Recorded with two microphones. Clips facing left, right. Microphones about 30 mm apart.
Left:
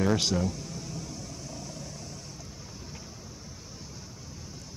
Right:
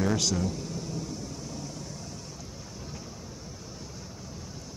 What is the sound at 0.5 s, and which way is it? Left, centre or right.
Vehicle, centre.